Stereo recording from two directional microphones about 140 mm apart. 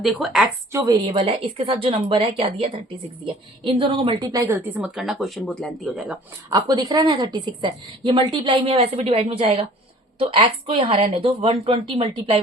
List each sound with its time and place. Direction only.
0.0 s speech: centre (ahead or behind)
0.7 s a woman's voice: 20° right (ahead or behind)
1.0 s a woman's voice: 35° right (ahead or behind)
4.8 s speech: centre (ahead or behind)
5.8 s speech: 10° right (ahead or behind)
6.5 s a woman's voice: 30° right (ahead or behind)